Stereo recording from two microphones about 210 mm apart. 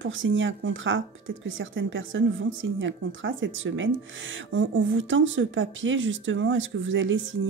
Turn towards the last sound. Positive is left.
turn(degrees=-65)  # may be behind; listen again after turning